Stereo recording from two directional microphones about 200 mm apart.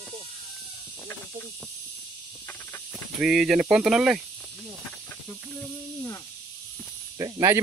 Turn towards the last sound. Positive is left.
turn(degrees=-15)  # may be behind; listen again after turning